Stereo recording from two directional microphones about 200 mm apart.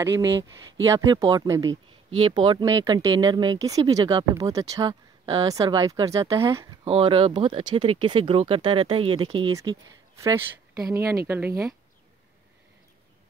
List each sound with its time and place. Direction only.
0.8 s speech: 15° right (ahead or behind)
1.7 s speech: 90° right
2.2 s speech: 20° right (ahead or behind)
6.8 s speech: 25° right (ahead or behind); by 11.7 s 10° right (ahead or behind)